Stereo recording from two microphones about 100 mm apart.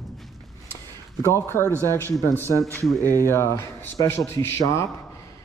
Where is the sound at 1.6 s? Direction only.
25° right (ahead or behind).